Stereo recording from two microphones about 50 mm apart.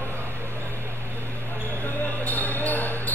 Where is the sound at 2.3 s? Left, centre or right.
Left.